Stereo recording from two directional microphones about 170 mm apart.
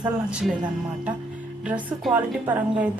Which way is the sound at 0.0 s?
5° right (ahead or behind).